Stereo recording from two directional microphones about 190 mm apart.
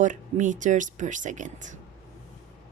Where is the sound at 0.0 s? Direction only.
40° right (ahead or behind).